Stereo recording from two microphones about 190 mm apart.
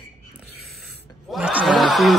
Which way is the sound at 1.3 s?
5° right (ahead or behind).